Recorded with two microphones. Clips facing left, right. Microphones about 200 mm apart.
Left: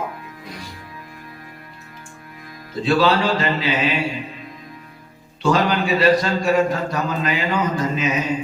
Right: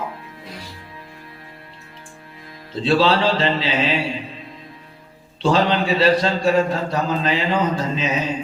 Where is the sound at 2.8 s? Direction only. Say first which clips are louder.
Even; 30° right (ahead or behind).